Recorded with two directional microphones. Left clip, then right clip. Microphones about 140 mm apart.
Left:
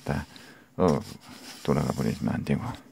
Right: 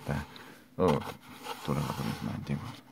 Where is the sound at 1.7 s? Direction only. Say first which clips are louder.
Left 8 dB; 40° left (ahead or behind).